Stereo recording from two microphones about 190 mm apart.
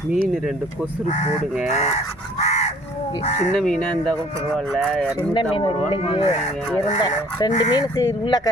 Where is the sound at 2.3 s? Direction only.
35° left (ahead or behind).